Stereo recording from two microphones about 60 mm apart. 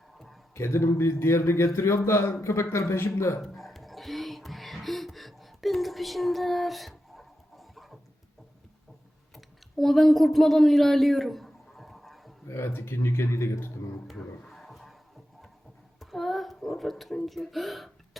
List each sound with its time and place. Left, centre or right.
0.5 s a man's voice: left
3.4 s music: centre
9.3 s a sound: centre
12.5 s a man's voice: left
14.2 s a sound: centre
16.0 s speech: centre